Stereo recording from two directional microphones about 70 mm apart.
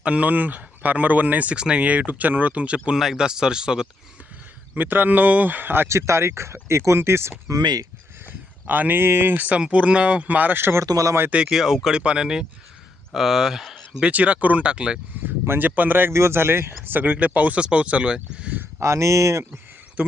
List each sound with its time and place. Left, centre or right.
0.0 s speech: centre
4.7 s speech: right
7.5 s speech: right
8.6 s speech: right
10.8 s speech: right
11.4 s speech: centre
14.0 s speech: centre
15.4 s speech: right
18.8 s speech: right
20.0 s speech: right